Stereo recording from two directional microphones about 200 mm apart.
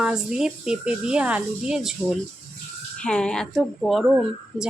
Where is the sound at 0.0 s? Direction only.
5° right (ahead or behind).